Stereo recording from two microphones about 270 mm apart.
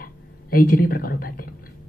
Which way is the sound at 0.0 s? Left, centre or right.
Left.